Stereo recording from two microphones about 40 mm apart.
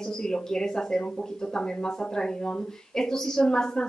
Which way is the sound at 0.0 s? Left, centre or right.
Centre.